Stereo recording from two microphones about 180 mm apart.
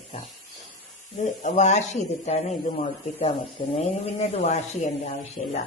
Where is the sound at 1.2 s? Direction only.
40° left (ahead or behind).